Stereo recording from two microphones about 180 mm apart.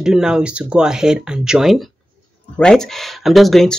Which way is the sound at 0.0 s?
5° right (ahead or behind).